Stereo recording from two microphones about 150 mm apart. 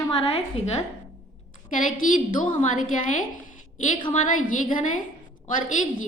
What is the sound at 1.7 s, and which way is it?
A woman's voice, 60° left (ahead or behind).